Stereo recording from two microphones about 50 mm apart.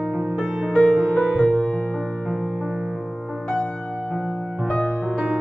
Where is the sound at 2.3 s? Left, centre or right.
Centre.